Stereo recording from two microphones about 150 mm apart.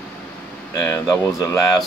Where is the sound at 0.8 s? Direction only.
15° left (ahead or behind).